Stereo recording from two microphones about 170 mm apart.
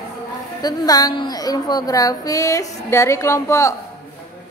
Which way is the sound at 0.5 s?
25° left (ahead or behind).